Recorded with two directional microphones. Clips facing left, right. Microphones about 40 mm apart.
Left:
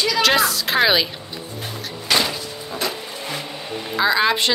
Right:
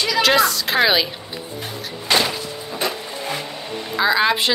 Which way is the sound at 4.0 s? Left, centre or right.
Centre.